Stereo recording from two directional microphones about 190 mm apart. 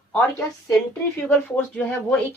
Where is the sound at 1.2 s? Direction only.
10° left (ahead or behind).